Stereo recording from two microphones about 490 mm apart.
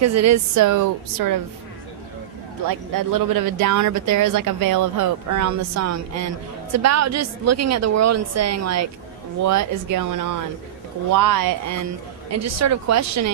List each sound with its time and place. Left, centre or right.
0.0 s speech: right
2.9 s speech: right